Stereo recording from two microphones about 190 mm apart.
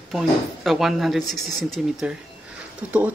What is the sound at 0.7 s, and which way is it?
Speech, centre (ahead or behind).